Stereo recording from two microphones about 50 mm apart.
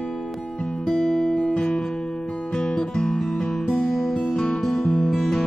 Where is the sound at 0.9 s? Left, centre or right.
Left.